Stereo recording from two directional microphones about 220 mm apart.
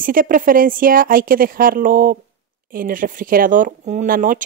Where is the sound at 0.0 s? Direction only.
40° right (ahead or behind).